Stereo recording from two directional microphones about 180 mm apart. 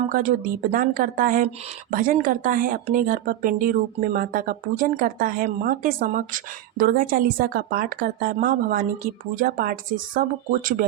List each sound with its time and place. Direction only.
0.1 s speech: 45° right (ahead or behind)